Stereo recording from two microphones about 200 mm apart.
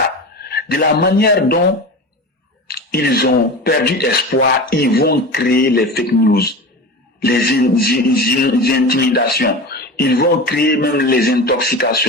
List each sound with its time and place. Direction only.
0.5 s a man's voice: 50° left (ahead or behind)
2.6 s a man's voice: 50° left (ahead or behind)